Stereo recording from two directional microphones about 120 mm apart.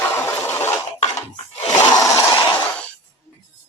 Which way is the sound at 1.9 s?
30° left (ahead or behind).